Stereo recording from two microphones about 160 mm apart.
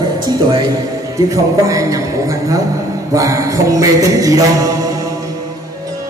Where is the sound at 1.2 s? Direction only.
20° right (ahead or behind).